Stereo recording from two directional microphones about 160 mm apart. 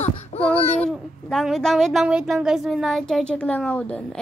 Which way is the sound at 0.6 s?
40° left (ahead or behind).